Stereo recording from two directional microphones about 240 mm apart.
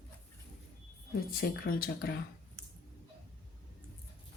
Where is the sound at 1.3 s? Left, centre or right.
Left.